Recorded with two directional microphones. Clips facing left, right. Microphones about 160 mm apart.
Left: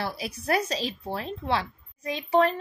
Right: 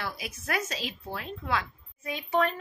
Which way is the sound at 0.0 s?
30° left (ahead or behind).